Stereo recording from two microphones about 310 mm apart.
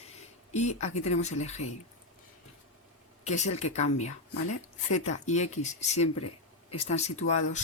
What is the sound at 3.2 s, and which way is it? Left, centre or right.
Speech, left.